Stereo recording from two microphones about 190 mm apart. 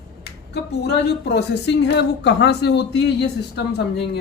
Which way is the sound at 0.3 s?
60° left (ahead or behind).